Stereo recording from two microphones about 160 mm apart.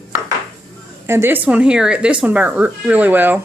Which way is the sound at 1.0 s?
15° right (ahead or behind).